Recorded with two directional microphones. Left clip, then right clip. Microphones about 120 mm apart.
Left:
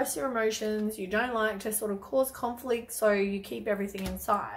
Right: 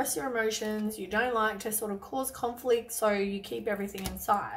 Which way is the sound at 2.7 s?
20° left (ahead or behind).